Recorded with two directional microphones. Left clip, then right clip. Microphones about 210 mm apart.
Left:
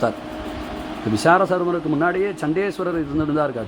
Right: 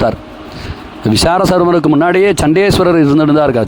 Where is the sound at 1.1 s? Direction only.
55° right (ahead or behind).